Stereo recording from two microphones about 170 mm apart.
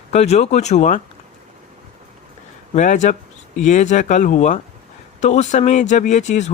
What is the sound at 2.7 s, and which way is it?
Speech, 45° left (ahead or behind).